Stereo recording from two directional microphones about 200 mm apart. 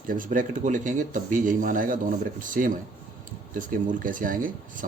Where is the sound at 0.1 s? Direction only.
40° right (ahead or behind).